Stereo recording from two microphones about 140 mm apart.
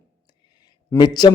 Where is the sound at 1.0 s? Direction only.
30° left (ahead or behind).